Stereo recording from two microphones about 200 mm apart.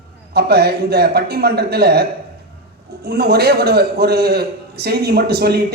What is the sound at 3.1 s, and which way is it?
A man's voice, 50° right (ahead or behind).